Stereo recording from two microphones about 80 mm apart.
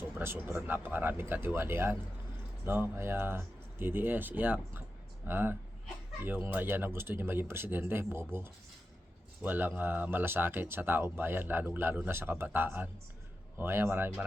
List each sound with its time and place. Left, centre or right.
0.2 s speech: right